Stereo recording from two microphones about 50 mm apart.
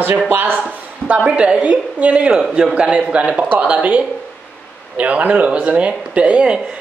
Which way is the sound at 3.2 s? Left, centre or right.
Centre.